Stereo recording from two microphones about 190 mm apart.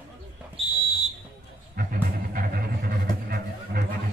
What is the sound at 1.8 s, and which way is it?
Music, 50° right (ahead or behind).